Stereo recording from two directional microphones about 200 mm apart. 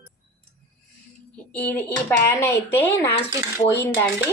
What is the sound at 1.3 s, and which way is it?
A woman's voice, 5° left (ahead or behind).